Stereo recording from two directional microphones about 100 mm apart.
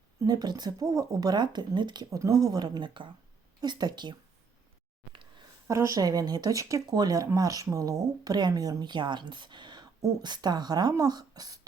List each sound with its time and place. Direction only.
0.3 s a woman's voice: 45° right (ahead or behind)
2.0 s a woman's voice: 35° right (ahead or behind); by 3.1 s 55° right (ahead or behind)
3.6 s a woman's voice: 40° right (ahead or behind)
5.6 s a woman's voice: 30° right (ahead or behind)